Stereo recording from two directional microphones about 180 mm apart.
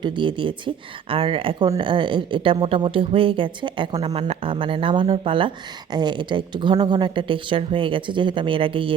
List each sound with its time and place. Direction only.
0.0 s speech: 25° right (ahead or behind)